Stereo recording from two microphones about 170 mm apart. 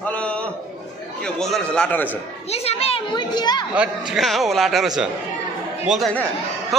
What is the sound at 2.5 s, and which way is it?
A child's voice, 35° left (ahead or behind).